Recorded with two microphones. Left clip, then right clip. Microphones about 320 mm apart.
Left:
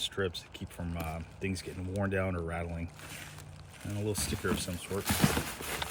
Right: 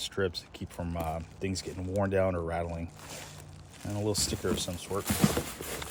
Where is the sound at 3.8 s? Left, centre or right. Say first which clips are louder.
Right 4 dB; right.